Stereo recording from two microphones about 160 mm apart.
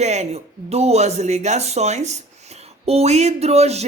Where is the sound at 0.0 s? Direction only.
45° right (ahead or behind).